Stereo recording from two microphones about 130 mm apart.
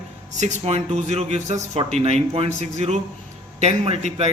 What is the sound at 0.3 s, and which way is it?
A man's voice, 60° right (ahead or behind).